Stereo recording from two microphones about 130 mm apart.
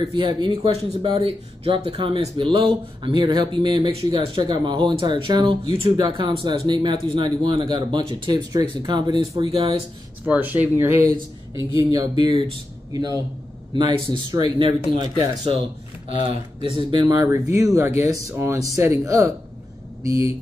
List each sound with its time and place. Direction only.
0.1 s speech: 35° right (ahead or behind)
1.0 s speech: 50° right (ahead or behind)
10.2 s speech: 10° right (ahead or behind)
11.9 s speech: 30° right (ahead or behind)
12.9 s speech: 25° right (ahead or behind)
17.2 s speech: 20° right (ahead or behind)